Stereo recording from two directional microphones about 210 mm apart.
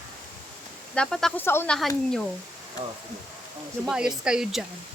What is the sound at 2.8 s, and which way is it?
Speech, 25° right (ahead or behind).